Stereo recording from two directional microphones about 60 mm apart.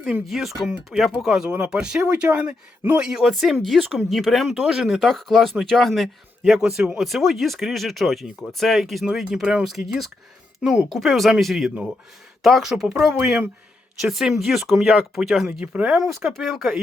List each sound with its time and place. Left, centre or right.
0.3 s speech: centre
6.4 s speech: centre
10.6 s speech: centre
10.9 s speech: centre
15.6 s speech: right
16.3 s speech: centre